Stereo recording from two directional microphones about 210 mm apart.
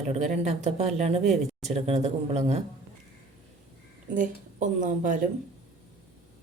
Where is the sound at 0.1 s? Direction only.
35° right (ahead or behind).